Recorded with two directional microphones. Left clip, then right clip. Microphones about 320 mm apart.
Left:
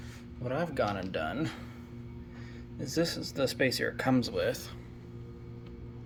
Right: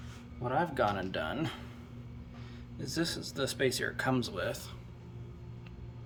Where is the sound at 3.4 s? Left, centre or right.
Centre.